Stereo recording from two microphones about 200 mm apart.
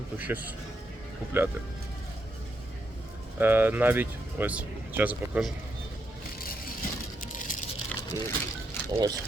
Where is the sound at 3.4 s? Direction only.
10° right (ahead or behind).